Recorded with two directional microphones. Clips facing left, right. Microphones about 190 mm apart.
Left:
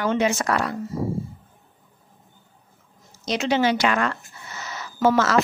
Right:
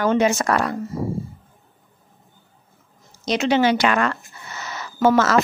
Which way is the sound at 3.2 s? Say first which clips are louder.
Right 3 dB; 65° right (ahead or behind).